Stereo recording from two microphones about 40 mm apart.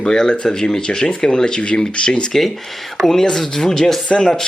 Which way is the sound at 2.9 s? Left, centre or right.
Centre.